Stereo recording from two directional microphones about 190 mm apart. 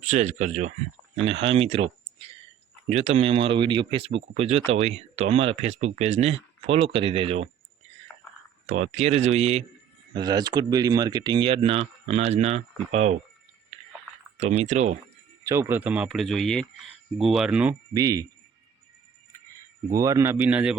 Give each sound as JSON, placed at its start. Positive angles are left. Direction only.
{"t": 0.0, "sound": "speech", "side_deg": -40}
{"t": 8.7, "sound": "speech", "side_deg": -35}
{"t": 10.2, "sound": "speech", "side_deg": -20}
{"t": 14.3, "sound": "speech", "side_deg": -35}
{"t": 15.4, "sound": "speech", "side_deg": -15}
{"t": 17.9, "sound": "speech", "side_deg": -20}
{"t": 19.9, "sound": "speech", "side_deg": -15}